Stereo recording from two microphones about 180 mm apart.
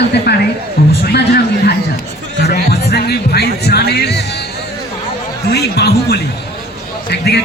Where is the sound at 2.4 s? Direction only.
60° left (ahead or behind).